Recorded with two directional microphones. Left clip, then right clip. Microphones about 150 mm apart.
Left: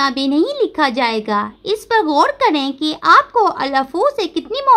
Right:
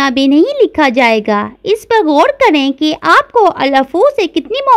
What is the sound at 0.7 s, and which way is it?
Speech, 40° right (ahead or behind).